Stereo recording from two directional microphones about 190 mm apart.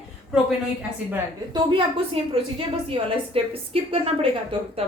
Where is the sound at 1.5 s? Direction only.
30° right (ahead or behind).